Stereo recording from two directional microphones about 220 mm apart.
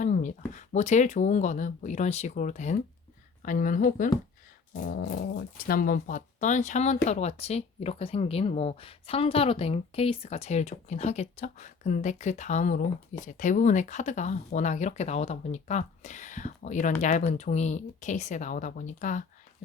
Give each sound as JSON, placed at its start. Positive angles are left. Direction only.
{"t": 0.0, "sound": "speech", "side_deg": 35}